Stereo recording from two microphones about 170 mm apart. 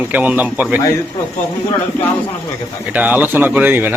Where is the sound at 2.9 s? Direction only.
10° right (ahead or behind).